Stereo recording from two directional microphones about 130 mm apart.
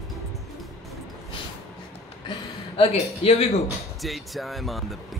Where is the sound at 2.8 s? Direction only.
50° left (ahead or behind).